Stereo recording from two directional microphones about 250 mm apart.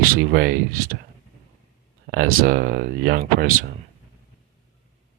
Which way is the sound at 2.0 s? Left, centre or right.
Right.